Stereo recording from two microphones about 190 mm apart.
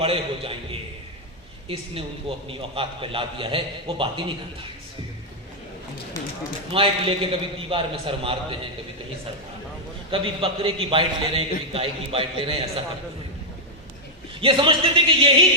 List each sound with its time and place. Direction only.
0.0 s a man's voice: 30° right (ahead or behind)
6.7 s a man's voice: 30° right (ahead or behind)
10.1 s a man's voice: 25° right (ahead or behind)
14.4 s a man's voice: 25° right (ahead or behind)